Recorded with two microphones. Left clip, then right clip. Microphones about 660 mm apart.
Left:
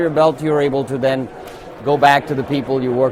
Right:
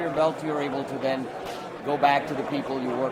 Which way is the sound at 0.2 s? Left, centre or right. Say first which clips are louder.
Left 10 dB; left.